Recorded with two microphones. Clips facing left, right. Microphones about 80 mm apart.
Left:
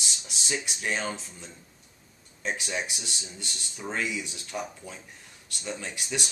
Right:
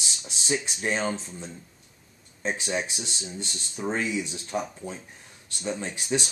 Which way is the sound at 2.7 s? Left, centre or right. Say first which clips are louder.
Right 3 dB; right.